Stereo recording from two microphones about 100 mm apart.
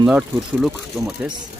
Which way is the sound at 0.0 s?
10° right (ahead or behind).